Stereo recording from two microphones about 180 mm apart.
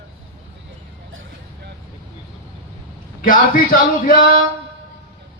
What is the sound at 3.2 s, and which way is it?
A man's voice, 50° left (ahead or behind).